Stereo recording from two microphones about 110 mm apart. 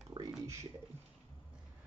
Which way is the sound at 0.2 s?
40° right (ahead or behind).